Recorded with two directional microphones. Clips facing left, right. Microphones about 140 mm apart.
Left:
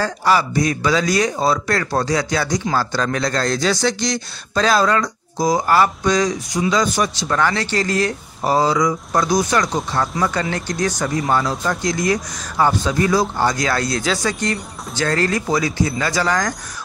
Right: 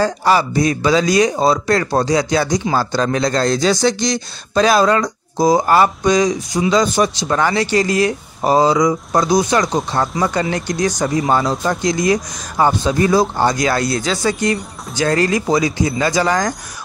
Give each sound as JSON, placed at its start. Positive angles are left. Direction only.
{"t": 0.0, "sound": "a man's voice", "side_deg": -25}
{"t": 11.2, "sound": "a man's voice", "side_deg": -30}
{"t": 13.6, "sound": "speech", "side_deg": -15}
{"t": 13.9, "sound": "speech", "side_deg": 0}